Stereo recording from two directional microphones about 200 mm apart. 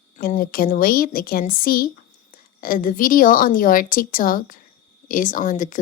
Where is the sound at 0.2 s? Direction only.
45° left (ahead or behind).